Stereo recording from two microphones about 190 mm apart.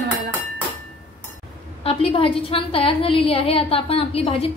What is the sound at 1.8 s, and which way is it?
A woman's voice, 30° left (ahead or behind).